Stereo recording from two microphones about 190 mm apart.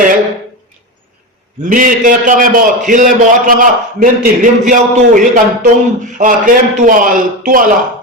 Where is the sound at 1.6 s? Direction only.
45° right (ahead or behind).